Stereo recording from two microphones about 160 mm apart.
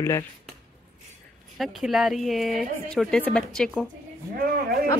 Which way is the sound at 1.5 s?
Centre (ahead or behind).